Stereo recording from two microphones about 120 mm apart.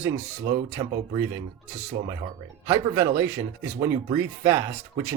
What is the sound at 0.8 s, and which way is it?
Speech, 35° right (ahead or behind).